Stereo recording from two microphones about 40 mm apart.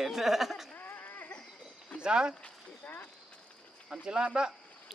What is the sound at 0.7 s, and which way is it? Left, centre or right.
Dog, left.